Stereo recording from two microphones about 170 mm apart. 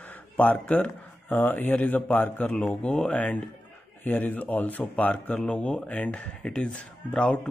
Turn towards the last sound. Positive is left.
turn(degrees=5)  # may be behind; listen again after turning